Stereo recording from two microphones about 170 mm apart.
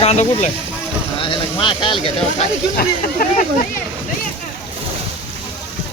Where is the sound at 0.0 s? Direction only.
35° left (ahead or behind).